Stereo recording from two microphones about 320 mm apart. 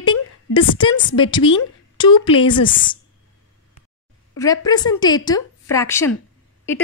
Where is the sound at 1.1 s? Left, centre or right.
Centre.